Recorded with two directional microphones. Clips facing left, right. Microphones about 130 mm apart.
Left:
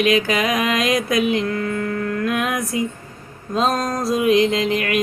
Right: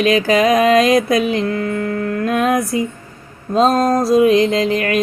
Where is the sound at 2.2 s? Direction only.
35° right (ahead or behind).